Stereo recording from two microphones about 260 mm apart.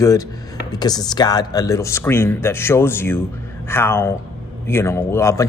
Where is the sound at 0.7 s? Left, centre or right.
Centre.